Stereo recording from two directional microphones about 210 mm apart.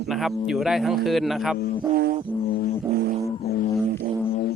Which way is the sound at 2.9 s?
30° right (ahead or behind).